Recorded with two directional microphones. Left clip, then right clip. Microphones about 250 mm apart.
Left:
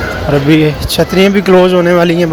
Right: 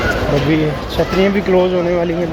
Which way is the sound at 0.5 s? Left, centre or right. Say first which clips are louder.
Left 6 dB; left.